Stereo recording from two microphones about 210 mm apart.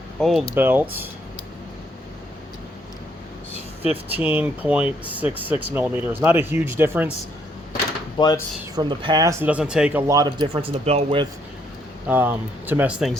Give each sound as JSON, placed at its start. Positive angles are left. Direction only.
{"t": 0.2, "sound": "speech", "side_deg": 0}
{"t": 4.1, "sound": "speech", "side_deg": -10}
{"t": 8.2, "sound": "speech", "side_deg": 25}
{"t": 8.7, "sound": "speech", "side_deg": -20}
{"t": 10.1, "sound": "speech", "side_deg": -20}
{"t": 12.0, "sound": "speech", "side_deg": -10}